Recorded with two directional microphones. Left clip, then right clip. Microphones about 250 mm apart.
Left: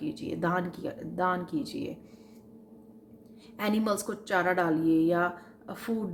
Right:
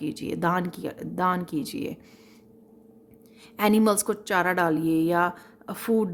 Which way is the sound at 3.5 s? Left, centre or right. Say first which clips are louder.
Right 7 dB; right.